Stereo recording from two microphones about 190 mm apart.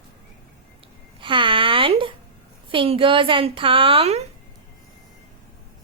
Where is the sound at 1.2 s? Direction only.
25° right (ahead or behind).